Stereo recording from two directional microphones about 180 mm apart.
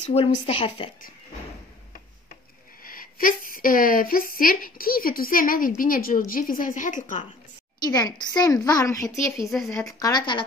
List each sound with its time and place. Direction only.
0.1 s speech: 35° left (ahead or behind)
2.8 s a woman's voice: 50° left (ahead or behind)
7.8 s a woman's voice: 20° left (ahead or behind)
9.5 s a woman's voice: centre (ahead or behind)
9.9 s a woman's voice: 20° left (ahead or behind)